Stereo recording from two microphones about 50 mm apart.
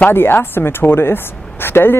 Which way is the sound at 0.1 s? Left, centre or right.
Left.